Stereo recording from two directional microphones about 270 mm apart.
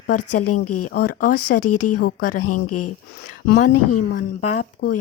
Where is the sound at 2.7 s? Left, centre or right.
Left.